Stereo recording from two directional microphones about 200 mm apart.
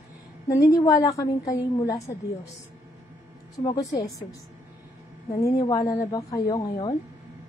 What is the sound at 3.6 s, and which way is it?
Speech, 25° left (ahead or behind).